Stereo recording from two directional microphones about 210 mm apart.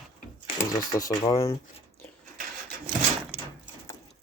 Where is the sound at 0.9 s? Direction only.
15° left (ahead or behind).